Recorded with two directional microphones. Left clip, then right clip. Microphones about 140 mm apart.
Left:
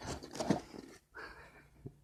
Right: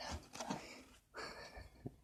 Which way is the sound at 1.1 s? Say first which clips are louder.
Right 2 dB; 30° right (ahead or behind).